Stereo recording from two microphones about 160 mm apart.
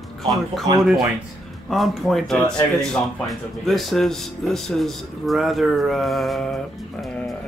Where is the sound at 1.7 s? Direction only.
Centre (ahead or behind).